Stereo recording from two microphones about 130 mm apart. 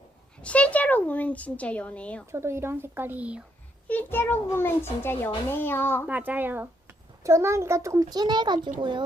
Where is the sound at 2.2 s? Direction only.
20° right (ahead or behind).